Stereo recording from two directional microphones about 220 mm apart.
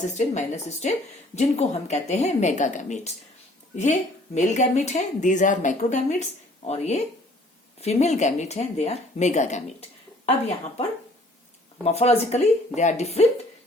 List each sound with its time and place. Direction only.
0.1 s speech: 30° left (ahead or behind)
4.4 s speech: 30° left (ahead or behind)
11.9 s speech: 30° left (ahead or behind)